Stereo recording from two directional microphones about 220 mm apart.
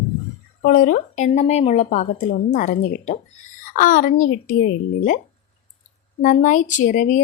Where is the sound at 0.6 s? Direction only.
40° left (ahead or behind).